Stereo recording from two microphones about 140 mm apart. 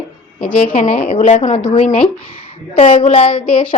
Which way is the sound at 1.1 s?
60° left (ahead or behind).